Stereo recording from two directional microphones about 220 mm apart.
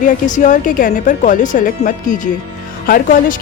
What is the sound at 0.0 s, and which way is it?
Speech, 35° left (ahead or behind).